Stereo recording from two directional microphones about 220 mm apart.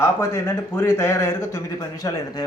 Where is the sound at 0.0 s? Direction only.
10° left (ahead or behind).